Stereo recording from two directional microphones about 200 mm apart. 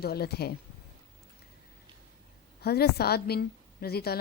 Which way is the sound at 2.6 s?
55° left (ahead or behind).